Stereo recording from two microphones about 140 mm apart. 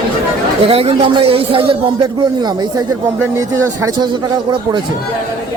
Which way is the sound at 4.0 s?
35° right (ahead or behind).